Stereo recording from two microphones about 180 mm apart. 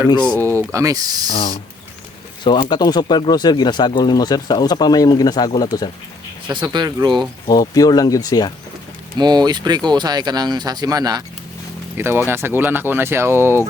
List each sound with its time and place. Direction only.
0.3 s speech: 10° left (ahead or behind)
0.5 s speech: 15° right (ahead or behind)
1.3 s speech: 30° left (ahead or behind)
6.5 s speech: 25° right (ahead or behind)
7.4 s speech: 20° left (ahead or behind)
9.1 s speech: 25° right (ahead or behind)